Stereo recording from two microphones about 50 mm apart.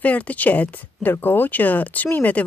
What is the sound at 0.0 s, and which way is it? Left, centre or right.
Speech, left.